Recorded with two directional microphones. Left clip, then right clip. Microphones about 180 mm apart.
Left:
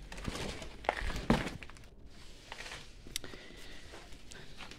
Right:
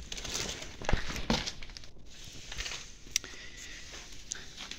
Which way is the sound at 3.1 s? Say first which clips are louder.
Right 8 dB; 20° left (ahead or behind).